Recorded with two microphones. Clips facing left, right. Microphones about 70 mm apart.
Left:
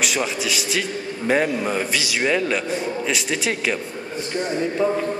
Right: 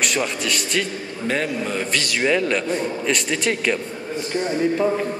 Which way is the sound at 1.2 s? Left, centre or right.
Centre.